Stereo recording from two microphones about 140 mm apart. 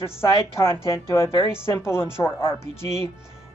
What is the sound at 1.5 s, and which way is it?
Speech, 20° left (ahead or behind).